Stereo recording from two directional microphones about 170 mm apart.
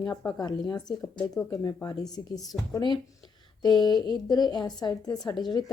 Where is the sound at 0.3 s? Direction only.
25° left (ahead or behind).